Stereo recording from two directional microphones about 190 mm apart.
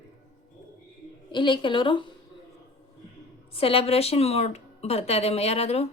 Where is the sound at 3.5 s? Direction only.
30° left (ahead or behind).